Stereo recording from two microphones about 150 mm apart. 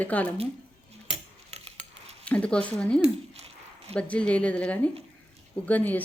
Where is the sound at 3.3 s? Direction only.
45° right (ahead or behind).